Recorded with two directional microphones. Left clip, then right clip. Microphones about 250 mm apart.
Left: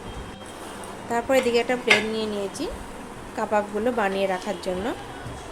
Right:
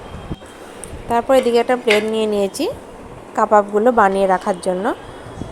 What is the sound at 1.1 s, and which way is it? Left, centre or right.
Speech, centre.